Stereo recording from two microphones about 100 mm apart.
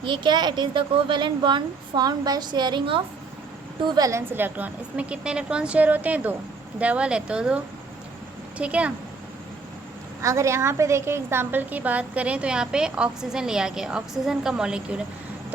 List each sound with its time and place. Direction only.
0.0 s a woman's voice: 50° right (ahead or behind)
3.8 s a woman's voice: 40° right (ahead or behind)
4.1 s a woman's voice: 20° right (ahead or behind)
10.2 s a woman's voice: 30° right (ahead or behind); by 15.0 s 10° right (ahead or behind)